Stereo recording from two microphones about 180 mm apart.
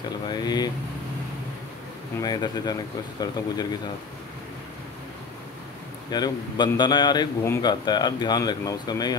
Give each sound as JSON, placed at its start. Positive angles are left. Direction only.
{"t": 0.3, "sound": "speech", "side_deg": 20}
{"t": 2.2, "sound": "speech", "side_deg": 25}
{"t": 6.0, "sound": "speech", "side_deg": 20}